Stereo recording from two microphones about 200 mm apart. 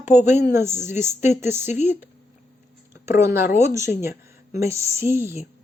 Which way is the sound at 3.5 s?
15° right (ahead or behind).